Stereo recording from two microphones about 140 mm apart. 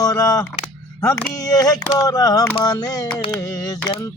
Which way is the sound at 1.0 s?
20° left (ahead or behind).